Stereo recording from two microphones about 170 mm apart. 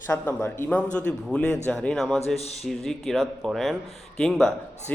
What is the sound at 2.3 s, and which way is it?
Speech, 40° left (ahead or behind).